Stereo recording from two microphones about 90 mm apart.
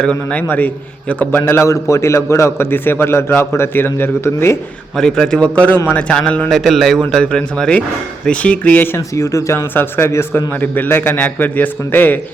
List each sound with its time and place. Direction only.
0.0 s a man's voice: 15° left (ahead or behind)
4.9 s speech: 5° left (ahead or behind)
6.5 s speech: centre (ahead or behind); by 9.0 s 20° left (ahead or behind)
9.0 s a man's voice: 35° left (ahead or behind)